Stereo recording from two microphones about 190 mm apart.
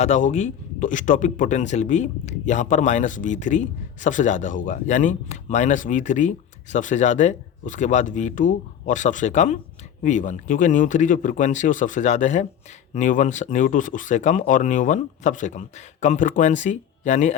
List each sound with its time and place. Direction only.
0.0 s speech: 40° left (ahead or behind)